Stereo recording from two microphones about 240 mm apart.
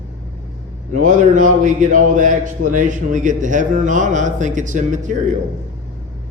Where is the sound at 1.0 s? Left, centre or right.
Right.